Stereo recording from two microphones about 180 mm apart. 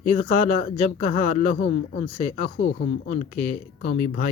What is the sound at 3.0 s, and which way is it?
Speech, 40° left (ahead or behind).